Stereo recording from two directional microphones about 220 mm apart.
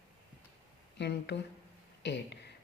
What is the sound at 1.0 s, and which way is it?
A woman's voice, 50° left (ahead or behind).